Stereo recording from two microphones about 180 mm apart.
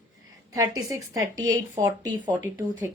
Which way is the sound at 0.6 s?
20° right (ahead or behind).